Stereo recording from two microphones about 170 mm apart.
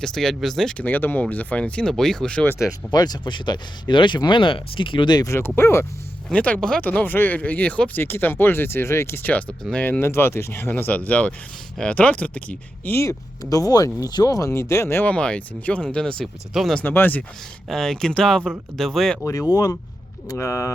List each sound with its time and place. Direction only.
0.0 s speech: centre (ahead or behind)
2.9 s speech: 25° left (ahead or behind); by 16.8 s centre (ahead or behind)
16.8 s speech: 10° left (ahead or behind)
19.2 s speech: 20° left (ahead or behind)